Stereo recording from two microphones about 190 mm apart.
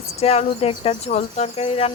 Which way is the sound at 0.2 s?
35° left (ahead or behind).